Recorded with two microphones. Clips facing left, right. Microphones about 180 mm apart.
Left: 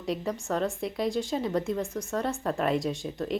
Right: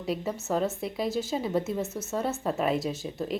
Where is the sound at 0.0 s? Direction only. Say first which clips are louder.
Even; 5° right (ahead or behind).